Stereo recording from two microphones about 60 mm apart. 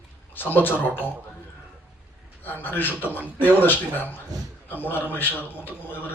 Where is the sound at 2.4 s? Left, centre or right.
Left.